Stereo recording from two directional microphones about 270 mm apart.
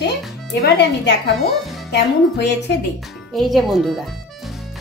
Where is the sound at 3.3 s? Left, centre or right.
Centre.